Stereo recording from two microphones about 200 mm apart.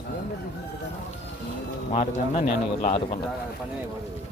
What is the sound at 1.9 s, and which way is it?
Speech, 30° left (ahead or behind).